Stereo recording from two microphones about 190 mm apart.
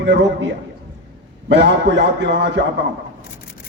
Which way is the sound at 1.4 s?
65° right (ahead or behind).